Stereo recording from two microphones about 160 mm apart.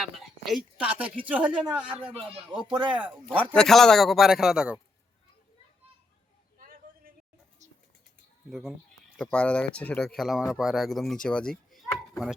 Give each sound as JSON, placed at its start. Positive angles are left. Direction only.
{"t": 0.0, "sound": "a woman's voice", "side_deg": 0}
{"t": 2.6, "sound": "speech", "side_deg": -30}
{"t": 3.5, "sound": "speech", "side_deg": 5}
{"t": 6.6, "sound": "a sound", "side_deg": -60}
{"t": 7.6, "sound": "a sound", "side_deg": -45}
{"t": 8.4, "sound": "speech", "side_deg": 0}